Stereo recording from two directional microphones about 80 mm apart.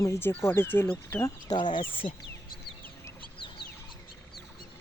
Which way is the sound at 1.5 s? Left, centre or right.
Left.